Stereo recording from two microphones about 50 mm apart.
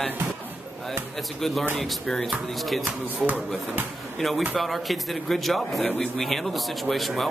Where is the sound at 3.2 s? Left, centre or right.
Right.